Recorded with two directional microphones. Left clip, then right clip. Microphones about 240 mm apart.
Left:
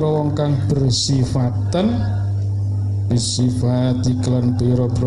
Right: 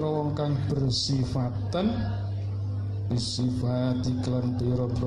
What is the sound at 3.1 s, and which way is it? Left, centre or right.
Speech, left.